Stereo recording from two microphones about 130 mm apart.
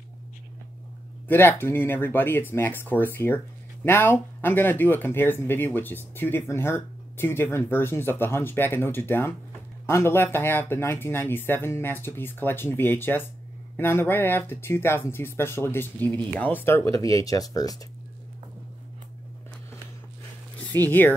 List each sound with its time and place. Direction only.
1.2 s speech: 15° left (ahead or behind)
20.7 s speech: 20° left (ahead or behind)